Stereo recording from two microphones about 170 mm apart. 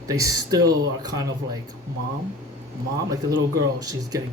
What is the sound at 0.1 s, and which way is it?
Speech, 20° right (ahead or behind).